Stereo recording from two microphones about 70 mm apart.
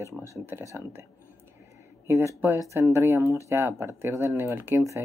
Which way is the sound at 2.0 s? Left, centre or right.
Right.